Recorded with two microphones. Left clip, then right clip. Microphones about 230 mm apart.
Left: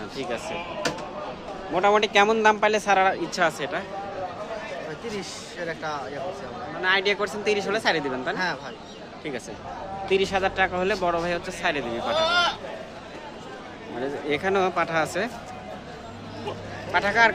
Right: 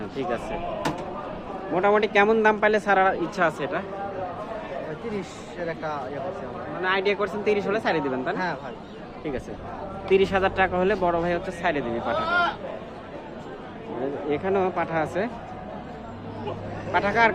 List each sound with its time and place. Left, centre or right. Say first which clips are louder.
1.7 s a man's voice: left 1 dB; centre
5.6 s a man's voice: right 1 dB; centre
10.1 s a man's voice: right 2 dB; centre
12.2 s speech: left 2 dB; left
14.3 s a man's voice: left 1 dB; centre
16.9 s a man's voice: left 1 dB; centre